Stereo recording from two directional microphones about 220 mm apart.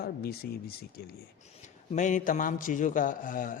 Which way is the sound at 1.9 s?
35° left (ahead or behind).